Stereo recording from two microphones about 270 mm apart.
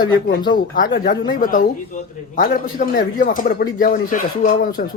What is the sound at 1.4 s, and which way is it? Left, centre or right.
Speech, left.